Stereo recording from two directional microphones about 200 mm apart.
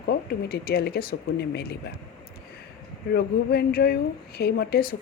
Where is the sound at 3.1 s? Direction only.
50° left (ahead or behind).